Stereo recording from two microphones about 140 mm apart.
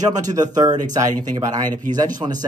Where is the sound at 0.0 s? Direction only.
25° right (ahead or behind).